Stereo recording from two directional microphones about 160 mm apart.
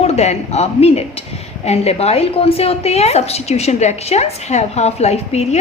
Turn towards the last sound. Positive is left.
turn(degrees=45)  # may be behind; listen again after turning